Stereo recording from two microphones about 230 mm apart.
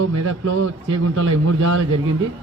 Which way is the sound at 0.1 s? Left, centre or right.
Right.